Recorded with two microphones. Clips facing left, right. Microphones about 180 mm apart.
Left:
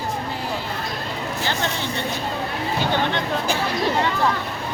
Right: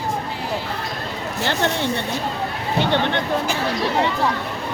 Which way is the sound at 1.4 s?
65° right (ahead or behind).